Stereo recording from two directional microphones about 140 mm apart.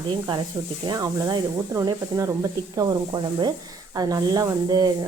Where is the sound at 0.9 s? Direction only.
25° right (ahead or behind).